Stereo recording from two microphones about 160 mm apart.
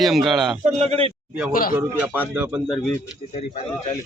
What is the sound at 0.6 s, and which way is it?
Speech, 45° right (ahead or behind).